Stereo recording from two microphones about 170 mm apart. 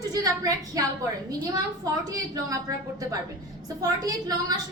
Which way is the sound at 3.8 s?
20° right (ahead or behind).